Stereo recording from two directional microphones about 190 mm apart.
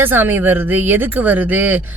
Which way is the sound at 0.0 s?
10° right (ahead or behind).